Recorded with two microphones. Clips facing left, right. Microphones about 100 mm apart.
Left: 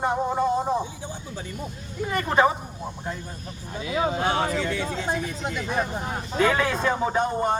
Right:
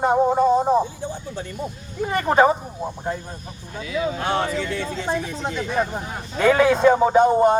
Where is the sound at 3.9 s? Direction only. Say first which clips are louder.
Right 1 dB; 45° left (ahead or behind).